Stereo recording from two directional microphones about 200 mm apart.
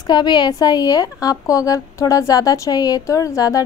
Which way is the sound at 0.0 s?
20° left (ahead or behind).